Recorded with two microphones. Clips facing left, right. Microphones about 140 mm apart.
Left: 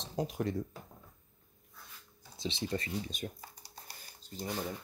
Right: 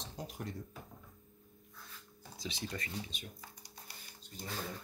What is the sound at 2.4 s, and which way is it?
Speech, 30° left (ahead or behind).